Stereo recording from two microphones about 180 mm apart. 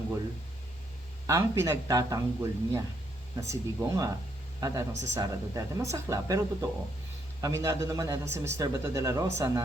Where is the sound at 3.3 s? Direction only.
15° right (ahead or behind).